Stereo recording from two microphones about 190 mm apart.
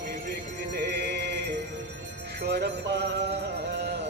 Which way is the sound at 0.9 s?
60° right (ahead or behind).